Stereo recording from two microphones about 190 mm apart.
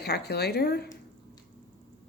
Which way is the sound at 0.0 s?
60° left (ahead or behind).